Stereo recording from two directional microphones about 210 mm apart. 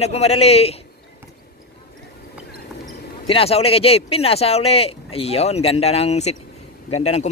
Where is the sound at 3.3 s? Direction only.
30° left (ahead or behind).